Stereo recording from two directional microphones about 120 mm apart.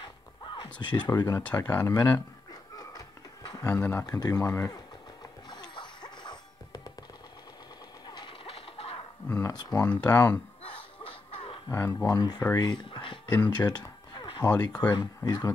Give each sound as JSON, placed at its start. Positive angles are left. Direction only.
{"t": 0.7, "sound": "speech", "side_deg": 40}
{"t": 1.1, "sound": "speech", "side_deg": 30}
{"t": 1.4, "sound": "speech", "side_deg": 15}
{"t": 2.7, "sound": "music", "side_deg": 30}
{"t": 3.4, "sound": "a sound", "side_deg": 35}
{"t": 3.9, "sound": "speech", "side_deg": 30}
{"t": 5.5, "sound": "music", "side_deg": 35}
{"t": 8.1, "sound": "train", "side_deg": 40}
{"t": 9.4, "sound": "a sound", "side_deg": 35}
{"t": 9.9, "sound": "speech", "side_deg": 30}
{"t": 11.7, "sound": "speech", "side_deg": 20}
{"t": 12.2, "sound": "speech", "side_deg": 35}